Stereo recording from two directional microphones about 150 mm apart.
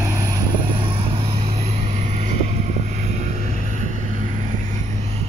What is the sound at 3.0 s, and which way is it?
Vehicle, 55° right (ahead or behind).